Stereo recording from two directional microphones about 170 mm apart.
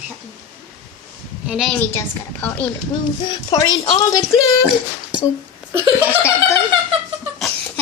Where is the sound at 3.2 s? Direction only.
25° left (ahead or behind).